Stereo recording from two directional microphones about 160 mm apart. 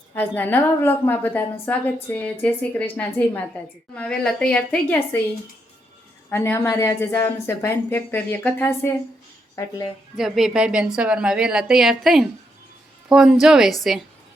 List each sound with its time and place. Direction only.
0.1 s a woman's voice: 10° left (ahead or behind)
6.3 s a woman's voice: 15° left (ahead or behind)
10.2 s a woman's voice: centre (ahead or behind)